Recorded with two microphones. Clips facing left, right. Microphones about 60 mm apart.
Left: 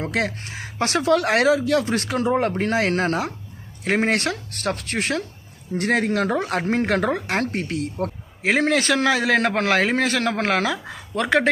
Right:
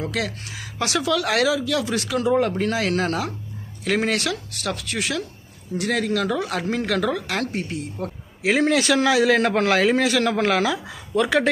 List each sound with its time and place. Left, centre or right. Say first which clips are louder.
0.0 s speech: left 2 dB; left
7.6 s speech: left 4 dB; left
8.4 s a man's voice: even; left